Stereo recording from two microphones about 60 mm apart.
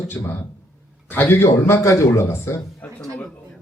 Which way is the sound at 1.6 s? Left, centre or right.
Left.